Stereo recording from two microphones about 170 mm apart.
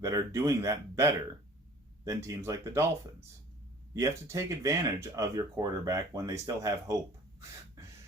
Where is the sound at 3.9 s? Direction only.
15° right (ahead or behind).